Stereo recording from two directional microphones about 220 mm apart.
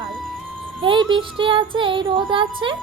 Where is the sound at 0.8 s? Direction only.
20° right (ahead or behind).